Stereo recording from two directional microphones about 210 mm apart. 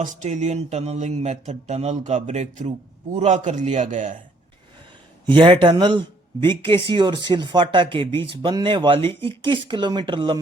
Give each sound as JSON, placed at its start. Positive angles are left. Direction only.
{"t": 0.0, "sound": "speech", "side_deg": -35}
{"t": 5.3, "sound": "speech", "side_deg": -25}